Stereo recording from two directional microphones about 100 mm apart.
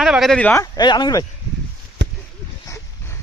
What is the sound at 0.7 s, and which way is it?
Speech, 45° left (ahead or behind).